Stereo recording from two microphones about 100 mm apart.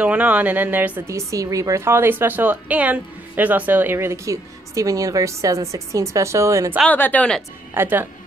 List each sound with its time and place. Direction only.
0.0 s speech: 15° right (ahead or behind)
1.0 s a woman's voice: 30° right (ahead or behind)
6.9 s speech: 15° left (ahead or behind)
7.7 s a woman's voice: 20° right (ahead or behind)